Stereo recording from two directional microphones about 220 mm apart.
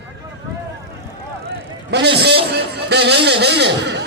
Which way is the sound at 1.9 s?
50° right (ahead or behind).